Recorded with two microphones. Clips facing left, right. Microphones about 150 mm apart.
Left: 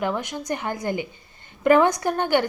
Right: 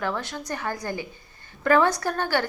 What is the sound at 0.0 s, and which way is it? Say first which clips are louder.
A woman's voice: left 3 dB; 15° left (ahead or behind).